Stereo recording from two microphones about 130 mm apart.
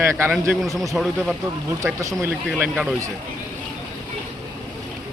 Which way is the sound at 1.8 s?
25° right (ahead or behind).